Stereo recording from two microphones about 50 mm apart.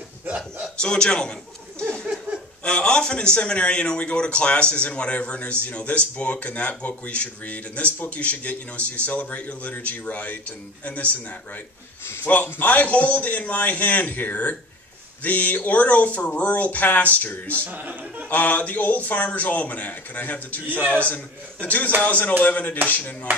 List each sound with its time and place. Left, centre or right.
0.7 s a man's voice: centre
2.6 s a man's voice: left
12.3 s speech: left